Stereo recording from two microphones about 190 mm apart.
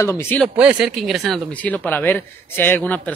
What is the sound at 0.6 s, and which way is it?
Speech, 5° right (ahead or behind).